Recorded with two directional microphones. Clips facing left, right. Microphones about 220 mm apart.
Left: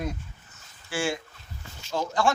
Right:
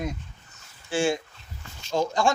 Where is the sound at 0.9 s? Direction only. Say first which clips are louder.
Right 5 dB; 20° right (ahead or behind).